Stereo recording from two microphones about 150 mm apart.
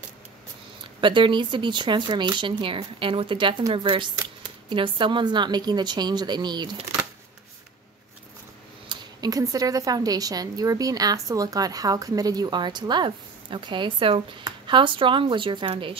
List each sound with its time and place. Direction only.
1.0 s a woman's voice: 35° right (ahead or behind)
8.8 s a woman's voice: 25° right (ahead or behind)